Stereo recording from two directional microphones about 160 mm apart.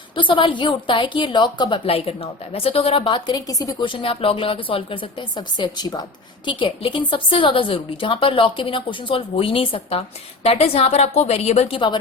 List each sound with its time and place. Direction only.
0.2 s a woman's voice: 30° left (ahead or behind)